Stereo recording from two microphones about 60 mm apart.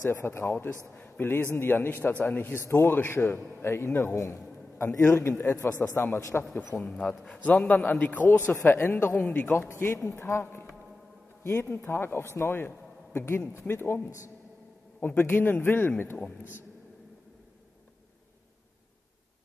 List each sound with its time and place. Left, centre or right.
0.1 s a man's voice: left
3.3 s a man's voice: centre
3.6 s a man's voice: left
6.3 s a man's voice: left
7.9 s a man's voice: left
8.3 s a man's voice: left
11.8 s a man's voice: left
15.0 s a man's voice: left